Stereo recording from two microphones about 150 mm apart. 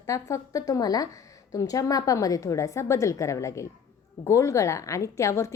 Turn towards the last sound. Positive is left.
turn(degrees=20)  # may be behind; listen again after turning